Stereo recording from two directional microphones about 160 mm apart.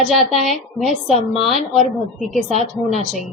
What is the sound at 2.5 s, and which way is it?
Speech, 45° left (ahead or behind).